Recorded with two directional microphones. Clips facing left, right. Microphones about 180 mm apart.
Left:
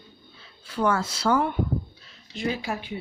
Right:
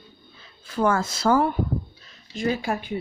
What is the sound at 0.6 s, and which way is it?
Speech, 45° right (ahead or behind).